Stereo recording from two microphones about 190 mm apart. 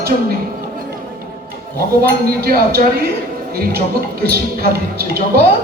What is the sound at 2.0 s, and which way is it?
Speech, 55° right (ahead or behind).